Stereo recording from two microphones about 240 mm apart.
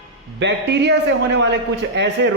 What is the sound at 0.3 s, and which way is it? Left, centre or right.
A man's voice, right.